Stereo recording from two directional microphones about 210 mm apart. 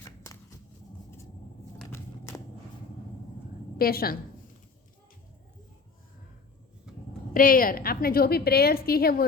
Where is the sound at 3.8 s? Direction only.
45° left (ahead or behind).